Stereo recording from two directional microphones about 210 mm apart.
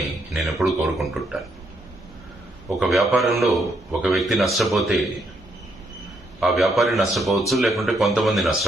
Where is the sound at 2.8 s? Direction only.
Centre (ahead or behind).